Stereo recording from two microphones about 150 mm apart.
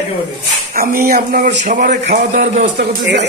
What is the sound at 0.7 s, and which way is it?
Speech, 85° right.